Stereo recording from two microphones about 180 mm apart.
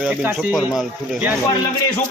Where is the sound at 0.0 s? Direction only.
5° right (ahead or behind).